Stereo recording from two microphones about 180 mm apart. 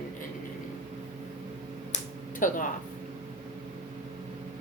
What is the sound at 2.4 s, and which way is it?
Speech, 45° left (ahead or behind).